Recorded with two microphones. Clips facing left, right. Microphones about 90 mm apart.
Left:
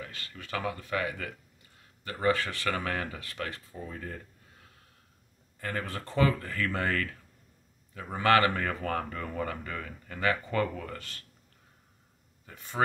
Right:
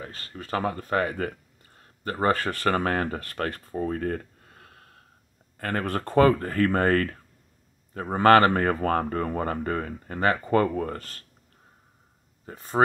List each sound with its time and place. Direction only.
0.0 s speech: 35° right (ahead or behind)
12.4 s speech: 40° right (ahead or behind)